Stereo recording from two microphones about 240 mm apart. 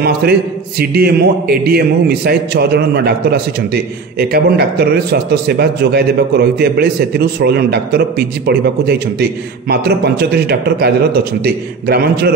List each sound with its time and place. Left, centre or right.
0.0 s a man's voice: right